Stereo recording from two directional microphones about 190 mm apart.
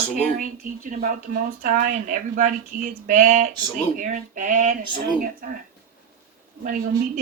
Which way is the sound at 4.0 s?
40° right (ahead or behind).